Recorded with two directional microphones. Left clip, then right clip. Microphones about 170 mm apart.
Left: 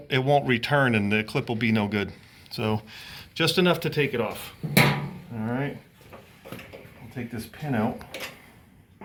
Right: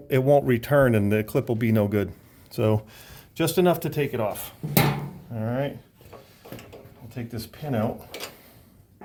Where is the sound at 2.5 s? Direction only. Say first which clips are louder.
Right 4 dB; 90° right.